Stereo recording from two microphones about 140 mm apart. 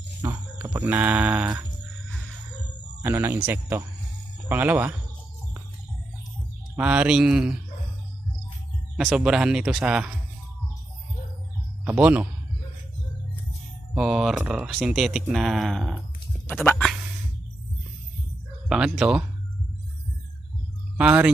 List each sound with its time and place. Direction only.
0.2 s speech: 20° right (ahead or behind)
3.0 s speech: 15° right (ahead or behind)
6.7 s speech: 10° right (ahead or behind)
9.0 s speech: 5° right (ahead or behind)
11.9 s speech: 10° right (ahead or behind)
13.9 s speech: 5° right (ahead or behind)
16.5 s speech: 10° left (ahead or behind)
18.7 s speech: 5° right (ahead or behind)
21.0 s speech: 10° right (ahead or behind)